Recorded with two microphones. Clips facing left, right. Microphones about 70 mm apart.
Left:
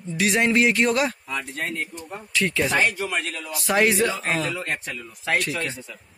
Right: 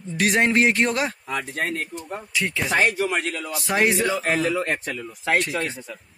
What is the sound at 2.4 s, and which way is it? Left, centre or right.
Speech, centre.